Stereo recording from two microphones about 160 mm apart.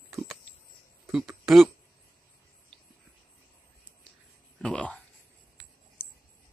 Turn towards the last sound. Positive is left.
turn(degrees=5)  # may be behind; listen again after turning